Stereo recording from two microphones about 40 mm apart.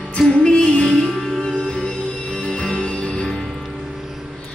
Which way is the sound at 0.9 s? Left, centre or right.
Centre.